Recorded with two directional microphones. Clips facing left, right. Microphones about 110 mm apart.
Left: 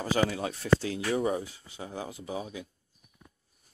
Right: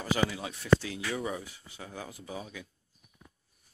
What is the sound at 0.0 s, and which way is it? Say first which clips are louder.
Speech: left 3 dB; 40° left (ahead or behind).